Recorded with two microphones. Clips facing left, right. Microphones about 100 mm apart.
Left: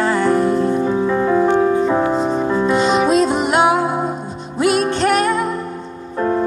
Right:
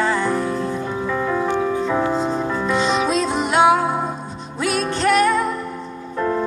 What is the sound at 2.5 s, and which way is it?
Music, 20° left (ahead or behind).